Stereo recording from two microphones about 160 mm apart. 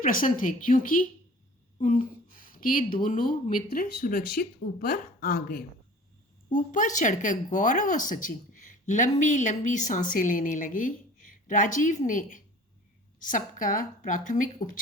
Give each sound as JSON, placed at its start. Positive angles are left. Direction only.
{"t": 0.0, "sound": "a woman's voice", "side_deg": 60}